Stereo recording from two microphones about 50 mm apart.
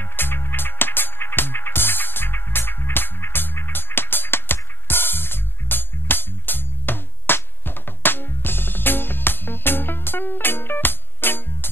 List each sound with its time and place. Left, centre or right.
0.2 s music: left